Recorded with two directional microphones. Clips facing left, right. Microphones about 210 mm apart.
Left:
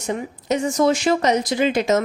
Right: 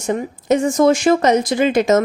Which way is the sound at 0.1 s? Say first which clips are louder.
Right 5 dB; 50° right (ahead or behind).